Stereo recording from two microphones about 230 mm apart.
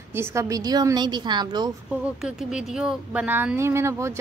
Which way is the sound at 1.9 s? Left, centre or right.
Centre.